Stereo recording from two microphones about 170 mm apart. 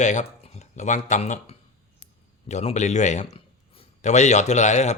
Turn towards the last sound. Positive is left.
turn(degrees=40)  # may be behind; listen again after turning